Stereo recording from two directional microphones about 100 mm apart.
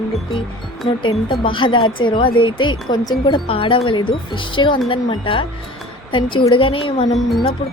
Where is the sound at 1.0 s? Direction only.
55° left (ahead or behind).